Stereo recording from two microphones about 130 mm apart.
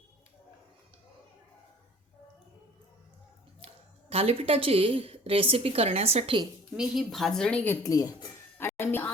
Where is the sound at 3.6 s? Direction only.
50° right (ahead or behind).